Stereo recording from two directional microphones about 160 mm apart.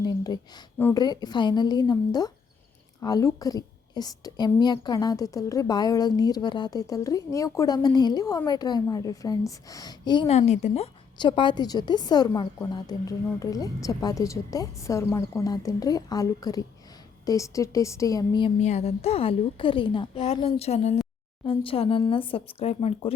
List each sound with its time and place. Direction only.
0.0 s a woman's voice: 25° left (ahead or behind)
10.2 s a woman's voice: 45° left (ahead or behind)
11.2 s a woman's voice: 30° left (ahead or behind)
18.6 s a woman's voice: 45° left (ahead or behind)